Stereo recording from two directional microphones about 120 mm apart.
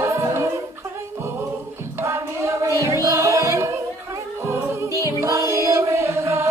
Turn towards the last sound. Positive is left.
turn(degrees=-25)  # may be behind; listen again after turning